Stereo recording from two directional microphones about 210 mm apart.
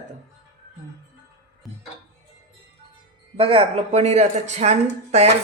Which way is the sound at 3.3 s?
25° right (ahead or behind).